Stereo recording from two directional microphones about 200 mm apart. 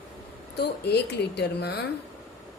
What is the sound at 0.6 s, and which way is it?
A woman's voice, 55° left (ahead or behind).